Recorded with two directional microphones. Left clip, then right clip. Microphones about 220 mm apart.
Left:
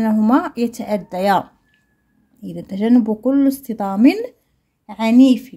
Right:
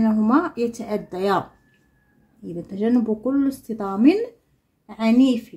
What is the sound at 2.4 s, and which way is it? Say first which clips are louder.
Speech: left 4 dB; 40° left (ahead or behind).